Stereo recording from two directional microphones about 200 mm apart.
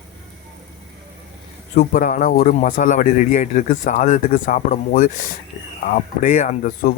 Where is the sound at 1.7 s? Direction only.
50° left (ahead or behind).